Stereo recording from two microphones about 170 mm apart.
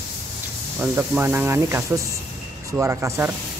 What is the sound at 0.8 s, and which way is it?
Speech, 10° right (ahead or behind).